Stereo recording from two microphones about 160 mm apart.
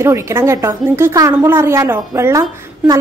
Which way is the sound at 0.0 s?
15° right (ahead or behind).